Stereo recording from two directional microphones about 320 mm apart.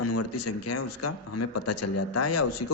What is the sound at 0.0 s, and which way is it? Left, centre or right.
A man's voice, left.